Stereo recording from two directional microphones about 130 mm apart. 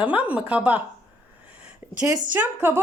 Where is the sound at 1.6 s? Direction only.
10° right (ahead or behind).